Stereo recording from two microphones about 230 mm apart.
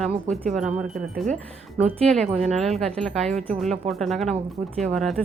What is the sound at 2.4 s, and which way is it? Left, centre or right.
Speech, right.